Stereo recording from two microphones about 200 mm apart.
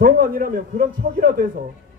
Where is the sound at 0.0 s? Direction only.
45° right (ahead or behind).